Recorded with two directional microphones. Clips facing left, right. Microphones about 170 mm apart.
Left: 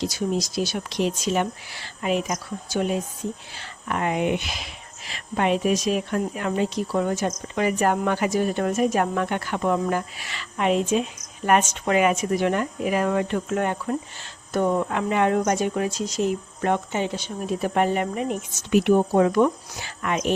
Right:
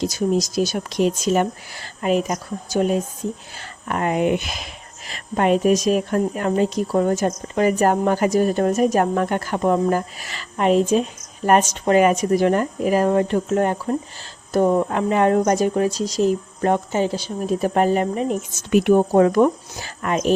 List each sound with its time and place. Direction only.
0.0 s speech: 45° right (ahead or behind)
18.7 s speech: 50° right (ahead or behind)